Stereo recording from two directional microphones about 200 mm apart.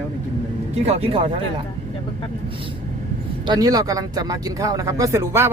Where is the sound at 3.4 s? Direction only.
20° right (ahead or behind).